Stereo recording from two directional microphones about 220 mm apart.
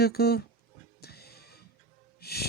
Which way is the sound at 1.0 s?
45° left (ahead or behind).